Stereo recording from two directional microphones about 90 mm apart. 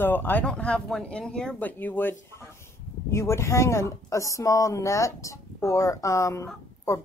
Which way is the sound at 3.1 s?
30° left (ahead or behind).